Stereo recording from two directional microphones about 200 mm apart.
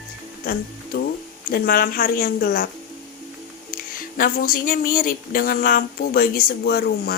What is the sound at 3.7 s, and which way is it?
Speech, 45° left (ahead or behind).